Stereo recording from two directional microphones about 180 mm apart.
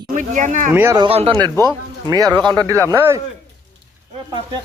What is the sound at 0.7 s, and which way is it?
Speech, 15° right (ahead or behind).